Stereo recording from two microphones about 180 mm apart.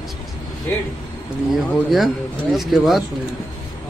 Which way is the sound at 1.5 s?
Centre (ahead or behind).